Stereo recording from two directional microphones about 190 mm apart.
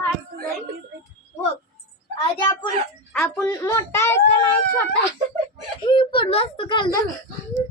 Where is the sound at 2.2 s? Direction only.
25° left (ahead or behind).